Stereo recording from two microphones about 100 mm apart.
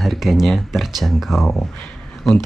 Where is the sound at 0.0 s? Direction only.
Centre (ahead or behind).